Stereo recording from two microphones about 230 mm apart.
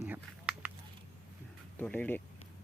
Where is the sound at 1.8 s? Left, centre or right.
Centre.